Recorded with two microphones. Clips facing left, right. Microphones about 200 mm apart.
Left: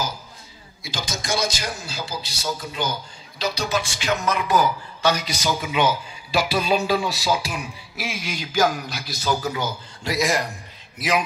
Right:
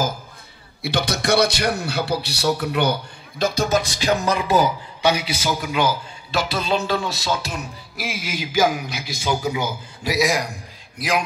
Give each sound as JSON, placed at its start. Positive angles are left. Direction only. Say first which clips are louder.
{"t": 0.8, "sound": "a man's voice", "louder": "right 8 dB", "side_deg": -65}
{"t": 5.0, "sound": "speech", "louder": "right 2 dB", "side_deg": -10}